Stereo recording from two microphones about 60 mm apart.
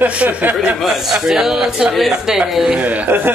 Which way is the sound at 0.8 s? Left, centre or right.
Centre.